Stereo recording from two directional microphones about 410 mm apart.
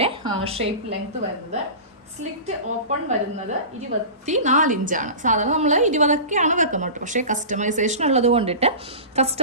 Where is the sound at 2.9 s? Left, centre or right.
Centre.